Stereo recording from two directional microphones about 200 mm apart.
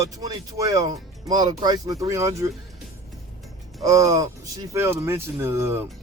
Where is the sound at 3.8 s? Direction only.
15° right (ahead or behind).